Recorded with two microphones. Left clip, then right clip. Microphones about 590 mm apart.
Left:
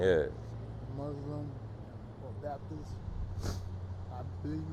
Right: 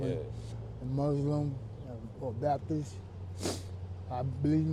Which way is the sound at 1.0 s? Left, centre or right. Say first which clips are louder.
Right 9 dB; right.